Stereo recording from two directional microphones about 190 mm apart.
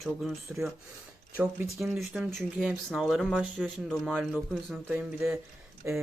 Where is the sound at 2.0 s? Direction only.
Centre (ahead or behind).